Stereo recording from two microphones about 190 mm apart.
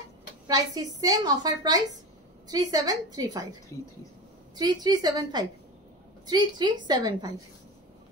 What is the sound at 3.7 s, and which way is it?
Speech, 15° left (ahead or behind).